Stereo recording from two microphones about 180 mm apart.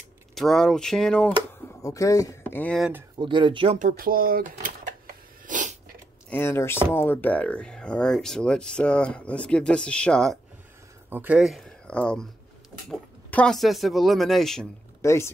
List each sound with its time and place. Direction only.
0.3 s speech: centre (ahead or behind)
1.8 s speech: 20° left (ahead or behind)
2.6 s speech: 5° left (ahead or behind)
3.2 s speech: 25° right (ahead or behind)
3.8 s a sound: 55° right (ahead or behind)
6.3 s speech: 15° left (ahead or behind)
11.1 s speech: 10° right (ahead or behind)
15.0 s speech: 15° left (ahead or behind)